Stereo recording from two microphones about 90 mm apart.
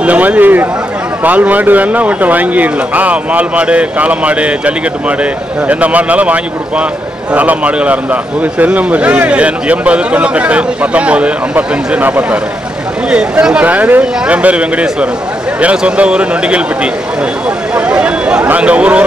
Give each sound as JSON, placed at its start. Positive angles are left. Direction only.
{"t": 0.0, "sound": "speech", "side_deg": -15}